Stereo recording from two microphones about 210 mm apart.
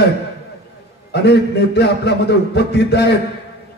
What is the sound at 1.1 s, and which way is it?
A man's voice, 50° left (ahead or behind).